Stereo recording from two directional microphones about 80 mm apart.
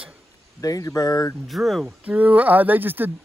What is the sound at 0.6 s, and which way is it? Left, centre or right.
Speech, left.